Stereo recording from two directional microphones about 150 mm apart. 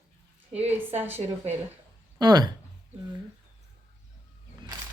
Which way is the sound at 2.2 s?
25° right (ahead or behind).